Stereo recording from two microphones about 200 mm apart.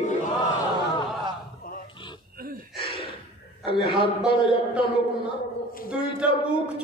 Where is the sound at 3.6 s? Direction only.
25° left (ahead or behind).